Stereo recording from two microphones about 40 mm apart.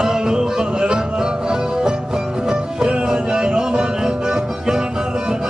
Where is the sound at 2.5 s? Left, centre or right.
Centre.